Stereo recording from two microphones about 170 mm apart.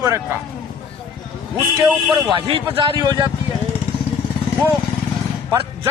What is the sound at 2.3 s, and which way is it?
A man's voice, 30° right (ahead or behind).